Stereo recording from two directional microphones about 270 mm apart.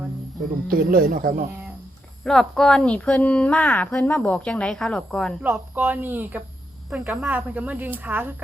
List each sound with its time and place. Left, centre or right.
0.7 s speech: right
2.2 s a woman's voice: centre
5.5 s speech: centre